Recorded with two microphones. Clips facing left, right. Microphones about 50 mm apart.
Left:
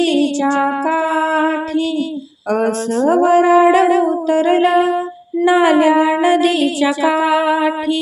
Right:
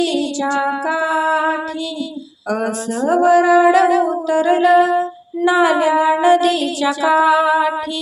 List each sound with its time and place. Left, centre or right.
0.0 s music: left
2.5 s speech: left
5.5 s a sound: left